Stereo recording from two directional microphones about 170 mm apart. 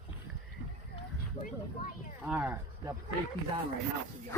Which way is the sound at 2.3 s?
10° right (ahead or behind).